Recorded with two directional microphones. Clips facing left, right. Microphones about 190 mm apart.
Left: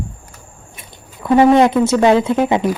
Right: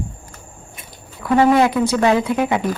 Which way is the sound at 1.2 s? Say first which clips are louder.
Left 4 dB; 25° left (ahead or behind).